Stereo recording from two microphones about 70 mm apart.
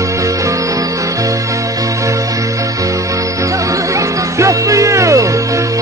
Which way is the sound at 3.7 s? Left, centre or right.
Right.